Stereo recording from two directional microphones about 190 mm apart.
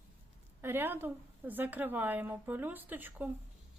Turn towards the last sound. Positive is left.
turn(degrees=-10)  # may be behind; listen again after turning